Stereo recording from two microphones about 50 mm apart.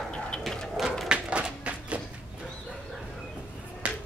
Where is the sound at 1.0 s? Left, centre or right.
Centre.